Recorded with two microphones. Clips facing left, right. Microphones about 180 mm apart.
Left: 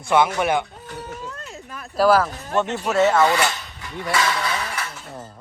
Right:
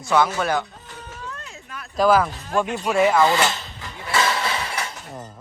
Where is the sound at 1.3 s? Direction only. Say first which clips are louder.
Left 2 dB; 35° left (ahead or behind).